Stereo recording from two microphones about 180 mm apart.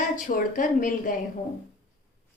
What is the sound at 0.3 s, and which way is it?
Speech, 50° left (ahead or behind).